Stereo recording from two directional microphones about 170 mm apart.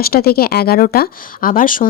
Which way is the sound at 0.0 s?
65° left (ahead or behind).